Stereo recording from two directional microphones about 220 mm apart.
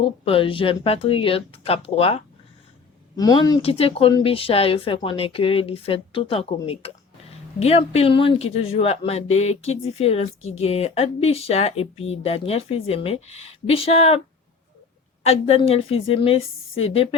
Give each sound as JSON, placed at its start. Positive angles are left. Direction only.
{"t": 0.0, "sound": "speech", "side_deg": 25}
{"t": 15.2, "sound": "speech", "side_deg": 25}